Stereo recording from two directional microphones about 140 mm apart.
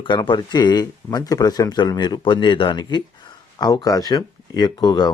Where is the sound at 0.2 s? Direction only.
30° left (ahead or behind).